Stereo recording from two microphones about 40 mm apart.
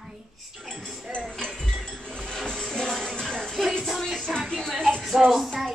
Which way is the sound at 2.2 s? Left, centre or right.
Centre.